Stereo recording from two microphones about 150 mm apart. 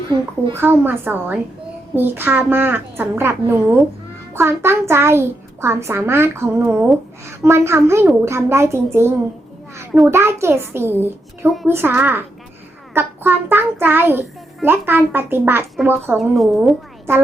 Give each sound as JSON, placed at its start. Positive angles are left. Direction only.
{"t": 0.5, "sound": "a child's voice", "side_deg": -15}
{"t": 16.1, "sound": "a woman's voice", "side_deg": 0}